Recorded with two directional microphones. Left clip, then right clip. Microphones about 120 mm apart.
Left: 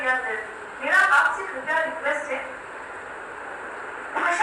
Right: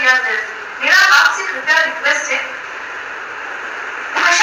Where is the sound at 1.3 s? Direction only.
40° right (ahead or behind).